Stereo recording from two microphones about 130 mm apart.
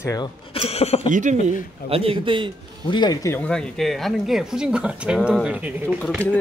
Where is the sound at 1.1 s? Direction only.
75° right (ahead or behind).